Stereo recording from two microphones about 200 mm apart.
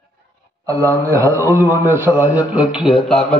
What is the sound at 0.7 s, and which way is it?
A man's voice, 15° right (ahead or behind).